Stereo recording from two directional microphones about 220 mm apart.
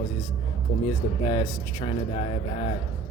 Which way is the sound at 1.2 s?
20° left (ahead or behind).